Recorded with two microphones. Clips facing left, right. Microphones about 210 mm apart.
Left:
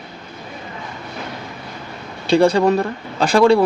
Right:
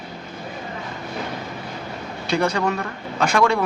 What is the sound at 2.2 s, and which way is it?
Speech, 30° left (ahead or behind).